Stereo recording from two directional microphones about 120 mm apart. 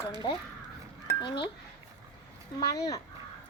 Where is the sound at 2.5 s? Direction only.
30° left (ahead or behind).